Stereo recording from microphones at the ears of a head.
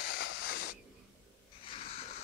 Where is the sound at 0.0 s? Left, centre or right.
Left.